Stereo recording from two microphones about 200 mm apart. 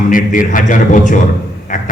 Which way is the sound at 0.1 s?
40° left (ahead or behind).